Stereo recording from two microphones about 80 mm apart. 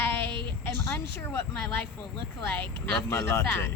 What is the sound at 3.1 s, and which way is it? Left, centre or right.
Speech, left.